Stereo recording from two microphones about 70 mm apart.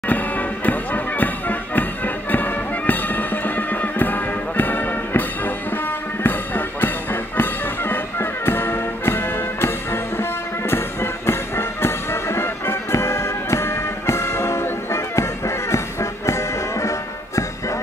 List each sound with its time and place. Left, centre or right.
0.1 s music: left